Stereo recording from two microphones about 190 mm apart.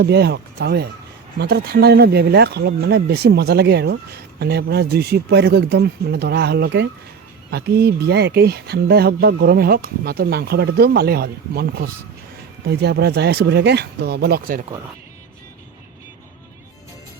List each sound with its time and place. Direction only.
0.0 s speech: 55° right (ahead or behind)